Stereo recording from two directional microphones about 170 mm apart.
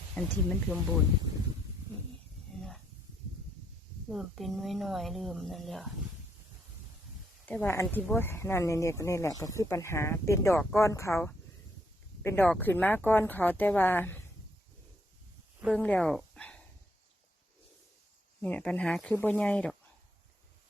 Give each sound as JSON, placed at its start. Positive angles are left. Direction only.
{"t": 0.1, "sound": "a woman's voice", "side_deg": 5}
{"t": 2.6, "sound": "snake", "side_deg": 0}
{"t": 4.1, "sound": "a woman's voice", "side_deg": 0}
{"t": 7.4, "sound": "speech", "side_deg": 10}
{"t": 15.6, "sound": "speech", "side_deg": 5}
{"t": 18.4, "sound": "a woman's voice", "side_deg": 10}